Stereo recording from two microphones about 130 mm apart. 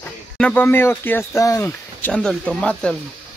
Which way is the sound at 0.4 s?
5° left (ahead or behind).